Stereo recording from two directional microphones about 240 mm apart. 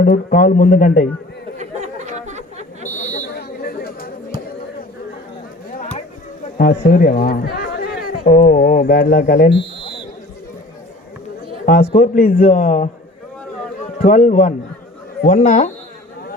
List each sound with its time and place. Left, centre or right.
0.0 s a man's voice: left
1.5 s a sound: right
3.0 s buzzer: left
6.6 s speech: left
11.6 s a man's voice: left
14.0 s a man's voice: left